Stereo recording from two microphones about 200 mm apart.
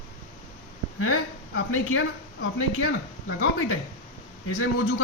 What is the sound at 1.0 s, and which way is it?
A woman's voice, 90° left.